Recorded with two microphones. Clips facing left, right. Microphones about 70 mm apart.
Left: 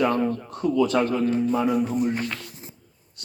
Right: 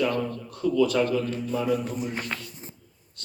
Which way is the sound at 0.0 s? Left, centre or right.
Left.